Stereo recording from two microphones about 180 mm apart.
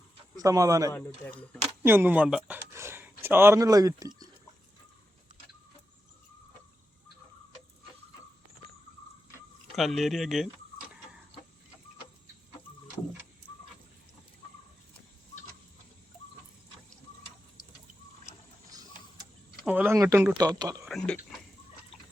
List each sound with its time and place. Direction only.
0.3 s speech: 20° right (ahead or behind)
0.9 s speech: 5° left (ahead or behind)
1.8 s a sound: 10° right (ahead or behind)
3.2 s speech: 15° right (ahead or behind)
9.7 s speech: centre (ahead or behind)
19.6 s speech: 10° right (ahead or behind)
20.8 s speech: 5° left (ahead or behind)